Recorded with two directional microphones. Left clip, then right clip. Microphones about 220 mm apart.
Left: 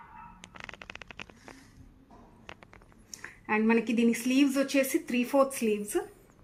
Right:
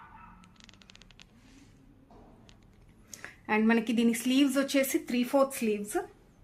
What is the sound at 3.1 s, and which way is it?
A woman's voice, 15° right (ahead or behind).